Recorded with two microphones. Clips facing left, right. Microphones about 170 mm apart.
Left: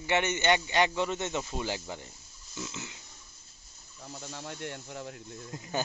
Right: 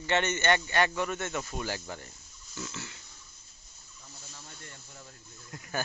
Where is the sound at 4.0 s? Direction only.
70° left (ahead or behind).